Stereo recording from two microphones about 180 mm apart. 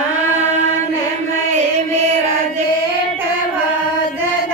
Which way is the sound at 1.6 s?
35° right (ahead or behind).